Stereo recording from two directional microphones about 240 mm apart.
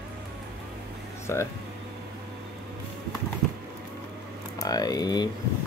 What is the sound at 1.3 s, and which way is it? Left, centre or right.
Speech, centre.